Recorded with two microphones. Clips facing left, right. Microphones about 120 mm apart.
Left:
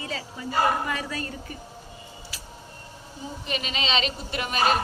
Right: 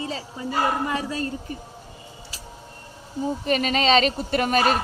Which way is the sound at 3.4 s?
45° right (ahead or behind).